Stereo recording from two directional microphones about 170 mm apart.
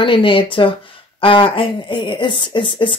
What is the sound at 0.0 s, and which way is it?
A woman's voice, 30° left (ahead or behind).